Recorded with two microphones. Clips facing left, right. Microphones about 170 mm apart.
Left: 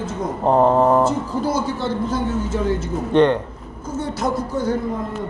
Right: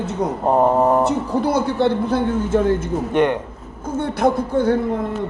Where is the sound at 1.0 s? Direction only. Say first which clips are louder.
Right 2 dB; 65° right (ahead or behind).